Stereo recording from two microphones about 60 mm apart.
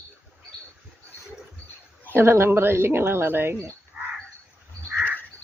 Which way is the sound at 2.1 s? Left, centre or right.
Right.